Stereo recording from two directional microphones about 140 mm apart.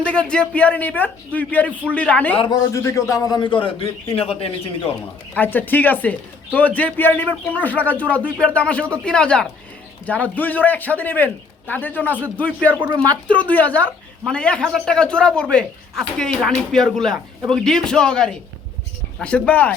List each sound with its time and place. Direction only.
0.1 s a man's voice: 5° left (ahead or behind)
2.7 s a man's voice: 20° left (ahead or behind); by 4.9 s 45° left (ahead or behind)
5.3 s a man's voice: 10° left (ahead or behind)
12.7 s speech: 25° right (ahead or behind)
13.2 s a man's voice: 10° left (ahead or behind)